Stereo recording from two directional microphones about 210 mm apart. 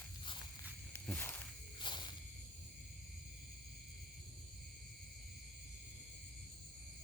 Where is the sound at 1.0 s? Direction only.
5° left (ahead or behind).